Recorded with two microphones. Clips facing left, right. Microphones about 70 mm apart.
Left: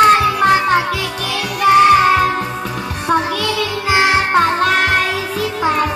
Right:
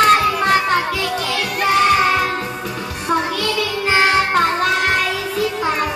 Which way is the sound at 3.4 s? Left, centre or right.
Centre.